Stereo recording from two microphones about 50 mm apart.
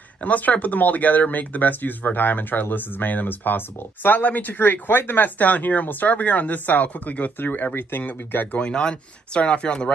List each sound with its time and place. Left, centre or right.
0.2 s speech: left
8.5 s speech: centre